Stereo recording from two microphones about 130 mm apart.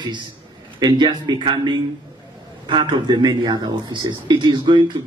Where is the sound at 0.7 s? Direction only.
35° right (ahead or behind).